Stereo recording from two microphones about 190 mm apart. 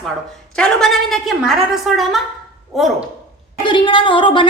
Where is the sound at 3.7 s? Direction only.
25° left (ahead or behind).